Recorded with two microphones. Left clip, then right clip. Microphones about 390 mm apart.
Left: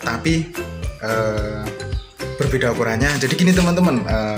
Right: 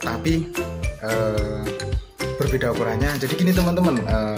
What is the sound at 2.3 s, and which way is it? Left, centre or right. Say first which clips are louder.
Speech: left 4 dB; right.